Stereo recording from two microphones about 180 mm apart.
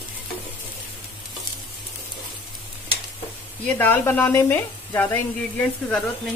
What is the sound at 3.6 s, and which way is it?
Speech, 10° left (ahead or behind).